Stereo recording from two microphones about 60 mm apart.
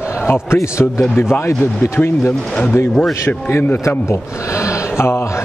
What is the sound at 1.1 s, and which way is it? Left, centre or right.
Speech, left.